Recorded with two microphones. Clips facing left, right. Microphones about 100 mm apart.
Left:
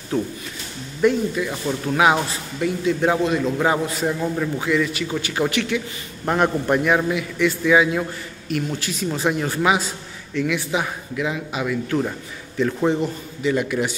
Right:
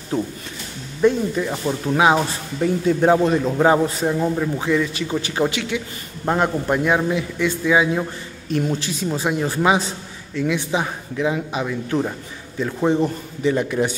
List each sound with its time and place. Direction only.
0.1 s speech: 20° right (ahead or behind)
2.6 s a man's voice: 35° right (ahead or behind)
4.0 s a man's voice: 15° right (ahead or behind)
4.6 s speech: 30° right (ahead or behind)
12.5 s a man's voice: 15° right (ahead or behind)
13.4 s speech: 30° right (ahead or behind)